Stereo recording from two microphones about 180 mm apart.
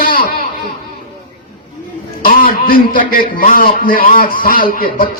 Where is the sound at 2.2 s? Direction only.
55° left (ahead or behind).